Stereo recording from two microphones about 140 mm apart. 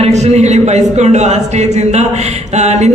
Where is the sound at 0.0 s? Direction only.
50° right (ahead or behind).